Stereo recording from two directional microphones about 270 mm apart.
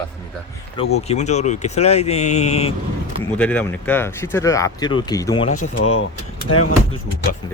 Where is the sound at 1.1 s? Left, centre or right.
Left.